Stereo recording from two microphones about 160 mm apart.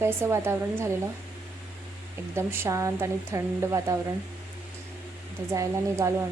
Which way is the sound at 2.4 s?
15° right (ahead or behind).